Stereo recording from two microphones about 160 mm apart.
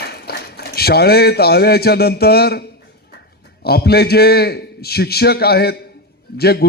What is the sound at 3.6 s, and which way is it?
A man's voice, 75° left (ahead or behind).